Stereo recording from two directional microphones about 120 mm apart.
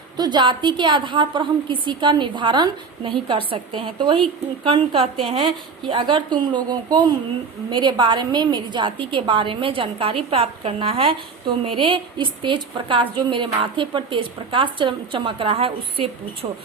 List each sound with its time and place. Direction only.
0.2 s a woman's voice: 40° right (ahead or behind)
4.6 s a woman's voice: 45° right (ahead or behind)